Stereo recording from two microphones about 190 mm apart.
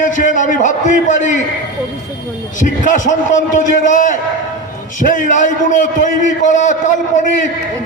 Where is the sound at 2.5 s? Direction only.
40° left (ahead or behind).